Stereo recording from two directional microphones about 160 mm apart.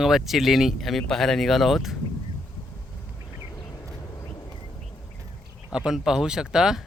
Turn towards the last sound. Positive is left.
turn(degrees=-5)  # may be behind; listen again after turning